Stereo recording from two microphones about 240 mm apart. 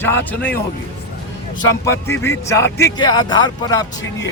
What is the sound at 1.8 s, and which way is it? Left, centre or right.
Speech, centre.